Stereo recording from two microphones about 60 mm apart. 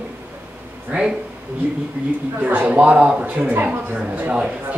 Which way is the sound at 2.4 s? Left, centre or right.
Right.